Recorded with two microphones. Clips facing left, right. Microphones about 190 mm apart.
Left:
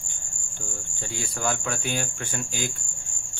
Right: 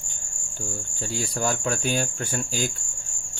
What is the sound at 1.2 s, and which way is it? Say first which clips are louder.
Speech: right 2 dB; 40° right (ahead or behind).